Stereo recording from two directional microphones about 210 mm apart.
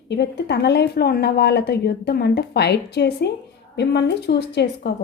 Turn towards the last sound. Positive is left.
turn(degrees=50)  # may be behind; listen again after turning